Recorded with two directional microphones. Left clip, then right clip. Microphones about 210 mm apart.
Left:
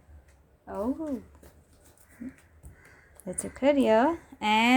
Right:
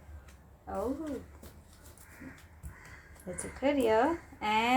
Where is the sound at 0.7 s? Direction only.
50° left (ahead or behind).